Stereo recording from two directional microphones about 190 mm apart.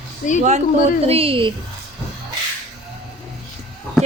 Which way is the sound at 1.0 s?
30° right (ahead or behind).